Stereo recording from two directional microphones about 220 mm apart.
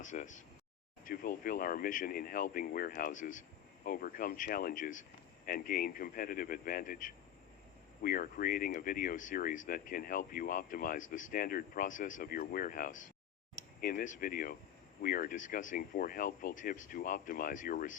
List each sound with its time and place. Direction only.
0.0 s speech: 35° left (ahead or behind)